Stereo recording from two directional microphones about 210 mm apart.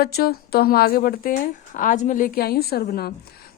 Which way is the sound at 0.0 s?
45° left (ahead or behind).